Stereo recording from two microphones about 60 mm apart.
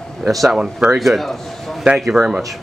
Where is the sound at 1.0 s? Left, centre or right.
Centre.